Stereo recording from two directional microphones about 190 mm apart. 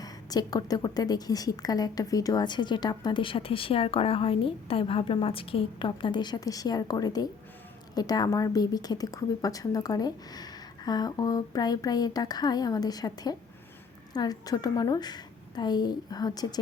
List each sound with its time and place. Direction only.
0.0 s a woman's voice: 20° left (ahead or behind)